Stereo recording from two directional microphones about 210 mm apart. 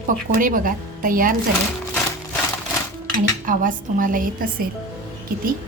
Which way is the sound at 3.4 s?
40° right (ahead or behind).